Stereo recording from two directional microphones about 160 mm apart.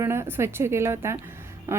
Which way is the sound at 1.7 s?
15° right (ahead or behind).